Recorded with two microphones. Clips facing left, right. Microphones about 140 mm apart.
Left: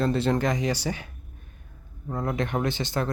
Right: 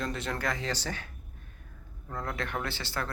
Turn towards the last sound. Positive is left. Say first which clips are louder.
# left 8 dB
turn(degrees=20)  # may be behind; listen again after turning